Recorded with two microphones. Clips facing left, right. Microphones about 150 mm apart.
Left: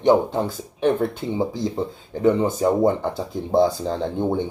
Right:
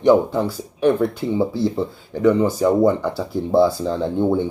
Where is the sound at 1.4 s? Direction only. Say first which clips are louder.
Right 3 dB; 15° left (ahead or behind).